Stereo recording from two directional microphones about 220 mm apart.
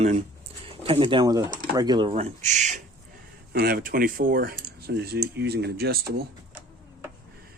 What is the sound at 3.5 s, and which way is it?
Speech, 45° right (ahead or behind).